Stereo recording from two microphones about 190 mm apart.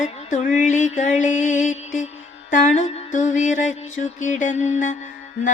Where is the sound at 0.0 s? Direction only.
40° left (ahead or behind).